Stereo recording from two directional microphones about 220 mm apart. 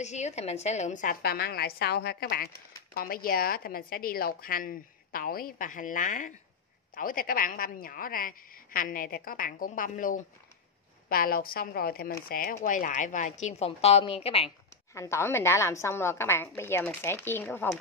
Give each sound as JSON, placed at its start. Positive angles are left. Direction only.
{"t": 0.0, "sound": "a woman's voice", "side_deg": 30}
{"t": 15.0, "sound": "a woman's voice", "side_deg": 10}